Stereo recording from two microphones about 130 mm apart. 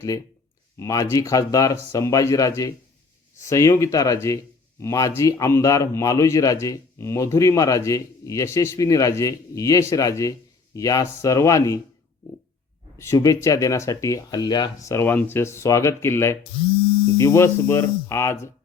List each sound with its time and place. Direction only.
0.8 s a man's voice: 25° left (ahead or behind)
13.0 s a man's voice: 25° left (ahead or behind)